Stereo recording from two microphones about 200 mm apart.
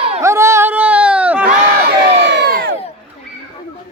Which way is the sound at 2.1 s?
60° right (ahead or behind).